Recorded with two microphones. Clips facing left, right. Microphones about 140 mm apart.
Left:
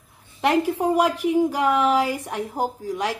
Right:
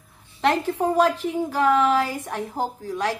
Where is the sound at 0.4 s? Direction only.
10° left (ahead or behind).